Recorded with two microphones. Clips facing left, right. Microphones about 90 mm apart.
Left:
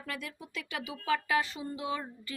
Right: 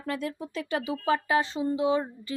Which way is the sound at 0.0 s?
30° right (ahead or behind).